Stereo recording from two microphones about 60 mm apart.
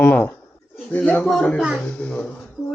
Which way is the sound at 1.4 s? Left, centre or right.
Centre.